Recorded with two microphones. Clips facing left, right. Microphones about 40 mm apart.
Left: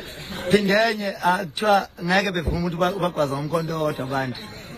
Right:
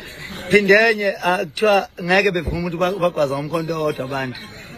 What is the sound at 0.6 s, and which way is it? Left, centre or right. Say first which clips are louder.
A man's voice: right 9 dB; right.